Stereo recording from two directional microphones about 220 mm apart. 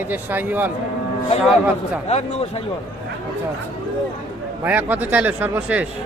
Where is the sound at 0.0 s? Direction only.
10° right (ahead or behind).